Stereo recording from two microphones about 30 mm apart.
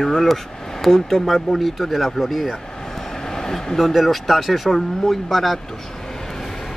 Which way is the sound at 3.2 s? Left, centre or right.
Centre.